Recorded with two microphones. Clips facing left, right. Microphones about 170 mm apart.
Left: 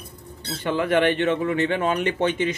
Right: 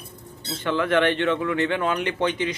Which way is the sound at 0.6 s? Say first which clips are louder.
Left 1 dB; 15° left (ahead or behind).